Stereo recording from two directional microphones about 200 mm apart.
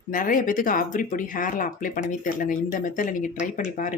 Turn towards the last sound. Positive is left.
turn(degrees=40)  # may be behind; listen again after turning